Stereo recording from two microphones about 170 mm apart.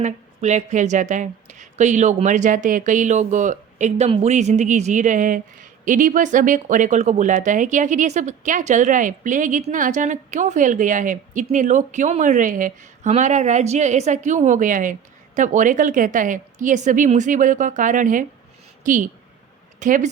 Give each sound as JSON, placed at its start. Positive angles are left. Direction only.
{"t": 0.0, "sound": "a woman's voice", "side_deg": -45}